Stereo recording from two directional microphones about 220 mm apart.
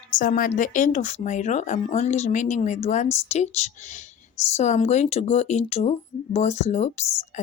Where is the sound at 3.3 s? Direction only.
30° left (ahead or behind).